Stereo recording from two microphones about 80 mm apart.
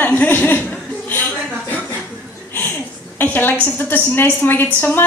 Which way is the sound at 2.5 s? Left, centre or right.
Left.